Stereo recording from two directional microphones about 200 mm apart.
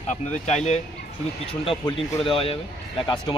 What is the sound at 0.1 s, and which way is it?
Speech, 35° left (ahead or behind).